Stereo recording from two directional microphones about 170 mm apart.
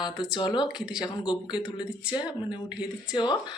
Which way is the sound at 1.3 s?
30° left (ahead or behind).